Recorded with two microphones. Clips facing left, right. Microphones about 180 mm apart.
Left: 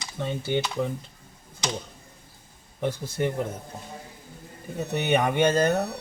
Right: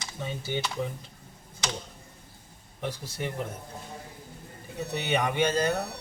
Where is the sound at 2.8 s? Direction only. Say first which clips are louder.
Left 7 dB; 50° left (ahead or behind).